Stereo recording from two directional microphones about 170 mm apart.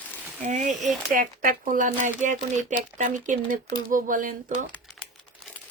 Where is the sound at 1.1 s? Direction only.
60° right (ahead or behind).